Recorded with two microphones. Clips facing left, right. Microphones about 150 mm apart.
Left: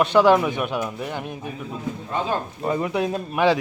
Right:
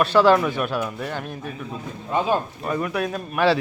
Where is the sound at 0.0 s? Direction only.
15° left (ahead or behind).